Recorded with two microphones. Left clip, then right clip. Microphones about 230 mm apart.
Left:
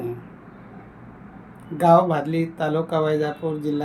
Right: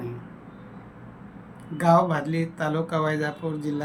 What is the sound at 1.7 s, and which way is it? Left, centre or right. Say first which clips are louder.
Speech: left 4 dB; centre.